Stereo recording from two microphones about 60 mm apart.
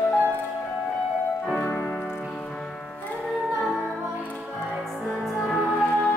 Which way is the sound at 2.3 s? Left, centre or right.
Centre.